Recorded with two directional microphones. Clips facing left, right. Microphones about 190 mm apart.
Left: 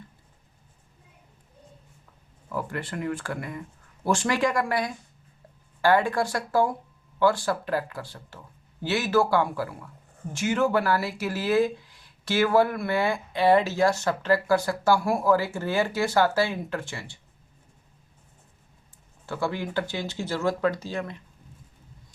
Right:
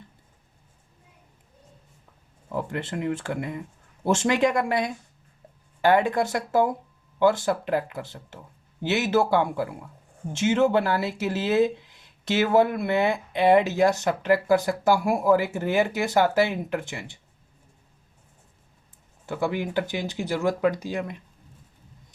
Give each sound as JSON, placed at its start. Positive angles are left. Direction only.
{"t": 2.5, "sound": "speech", "side_deg": -20}
{"t": 19.2, "sound": "speech", "side_deg": -15}